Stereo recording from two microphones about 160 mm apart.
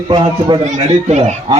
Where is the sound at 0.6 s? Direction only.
50° right (ahead or behind).